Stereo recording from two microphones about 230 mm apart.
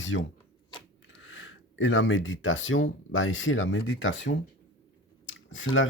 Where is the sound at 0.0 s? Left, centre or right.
Left.